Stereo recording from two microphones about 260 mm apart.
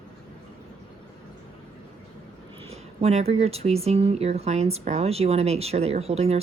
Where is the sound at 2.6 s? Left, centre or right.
Right.